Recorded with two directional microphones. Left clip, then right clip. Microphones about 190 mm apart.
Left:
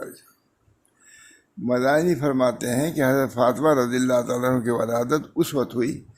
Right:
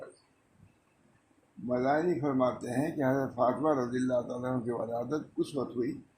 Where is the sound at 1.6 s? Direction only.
60° left (ahead or behind).